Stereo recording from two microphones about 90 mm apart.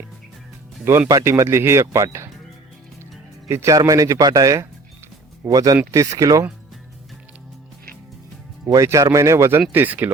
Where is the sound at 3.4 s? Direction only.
35° right (ahead or behind).